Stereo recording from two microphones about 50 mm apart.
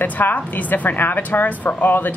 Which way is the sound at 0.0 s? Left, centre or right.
Left.